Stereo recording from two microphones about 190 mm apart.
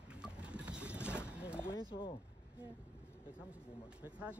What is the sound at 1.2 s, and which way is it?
Vehicle, 5° right (ahead or behind).